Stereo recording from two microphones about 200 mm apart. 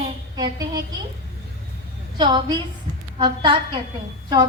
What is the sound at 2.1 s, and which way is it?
A woman's voice, 20° right (ahead or behind).